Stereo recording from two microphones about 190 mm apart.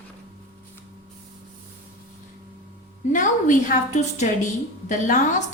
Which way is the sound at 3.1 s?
45° left (ahead or behind).